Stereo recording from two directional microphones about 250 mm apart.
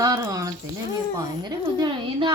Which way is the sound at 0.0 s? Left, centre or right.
Centre.